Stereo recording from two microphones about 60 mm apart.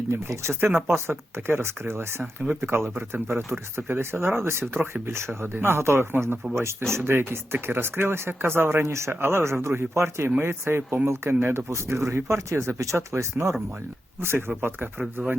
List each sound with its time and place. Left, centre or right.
0.1 s speech: right
11.7 s speech: right
14.2 s speech: right